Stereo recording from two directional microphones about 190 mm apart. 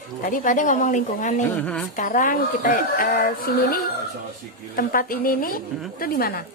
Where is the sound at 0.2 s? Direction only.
45° left (ahead or behind).